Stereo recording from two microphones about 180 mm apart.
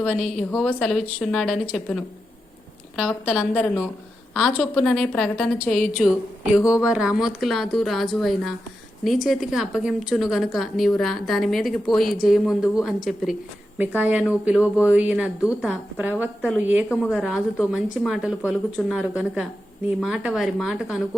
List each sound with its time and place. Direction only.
0.0 s a woman's voice: 5° left (ahead or behind)